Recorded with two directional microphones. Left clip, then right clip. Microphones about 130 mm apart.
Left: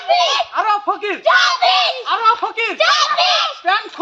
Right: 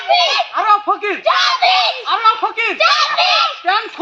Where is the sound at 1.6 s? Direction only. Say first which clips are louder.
Right 1 dB; 15° left (ahead or behind).